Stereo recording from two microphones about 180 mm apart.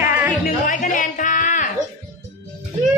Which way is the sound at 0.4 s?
45° left (ahead or behind).